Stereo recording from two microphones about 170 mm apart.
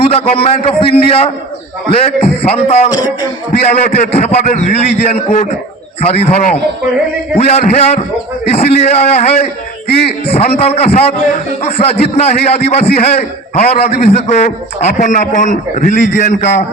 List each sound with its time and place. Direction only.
0.0 s a man's voice: 35° left (ahead or behind)
9.9 s a man's voice: 75° left (ahead or behind)
10.2 s a man's voice: 35° left (ahead or behind)